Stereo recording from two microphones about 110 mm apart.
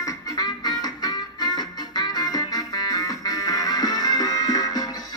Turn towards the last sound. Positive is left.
turn(degrees=35)  # may be behind; listen again after turning